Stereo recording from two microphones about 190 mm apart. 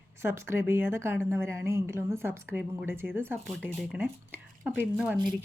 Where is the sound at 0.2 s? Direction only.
15° right (ahead or behind).